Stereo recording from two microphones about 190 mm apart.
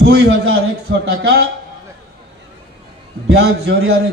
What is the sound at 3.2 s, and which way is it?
Speech, 60° right (ahead or behind).